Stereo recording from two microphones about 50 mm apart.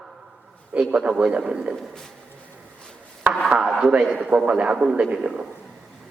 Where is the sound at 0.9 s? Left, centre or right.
Right.